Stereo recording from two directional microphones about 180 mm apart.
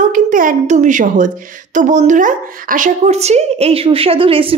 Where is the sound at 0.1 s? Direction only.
50° right (ahead or behind).